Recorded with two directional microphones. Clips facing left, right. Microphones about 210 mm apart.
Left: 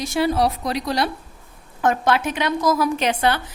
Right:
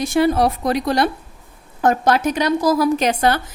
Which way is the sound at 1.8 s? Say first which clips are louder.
Right 3 dB; 40° right (ahead or behind).